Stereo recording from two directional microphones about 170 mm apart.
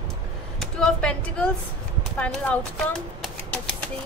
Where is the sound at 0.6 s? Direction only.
5° left (ahead or behind).